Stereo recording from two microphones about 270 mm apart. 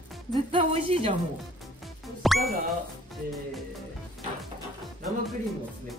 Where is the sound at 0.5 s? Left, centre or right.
Right.